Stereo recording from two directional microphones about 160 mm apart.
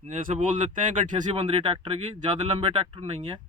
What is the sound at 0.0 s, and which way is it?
Speech, 50° right (ahead or behind).